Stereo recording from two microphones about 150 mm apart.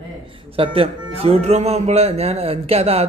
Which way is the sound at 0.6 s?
40° right (ahead or behind).